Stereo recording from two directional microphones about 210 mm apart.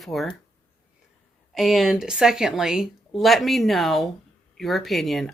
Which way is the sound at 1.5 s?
Centre (ahead or behind).